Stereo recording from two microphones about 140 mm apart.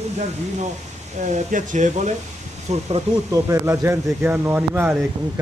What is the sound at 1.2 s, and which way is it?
Speech, 65° right (ahead or behind).